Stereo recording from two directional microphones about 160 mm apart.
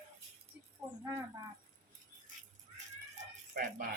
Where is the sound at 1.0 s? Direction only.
15° right (ahead or behind).